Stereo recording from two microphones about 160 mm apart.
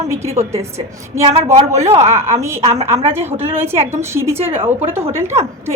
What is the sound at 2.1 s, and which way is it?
Speech, 15° right (ahead or behind).